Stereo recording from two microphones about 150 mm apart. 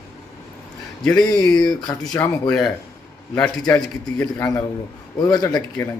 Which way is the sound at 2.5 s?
Centre (ahead or behind).